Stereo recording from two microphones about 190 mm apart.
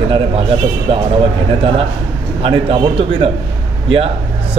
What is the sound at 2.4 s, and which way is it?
Speech, 30° right (ahead or behind).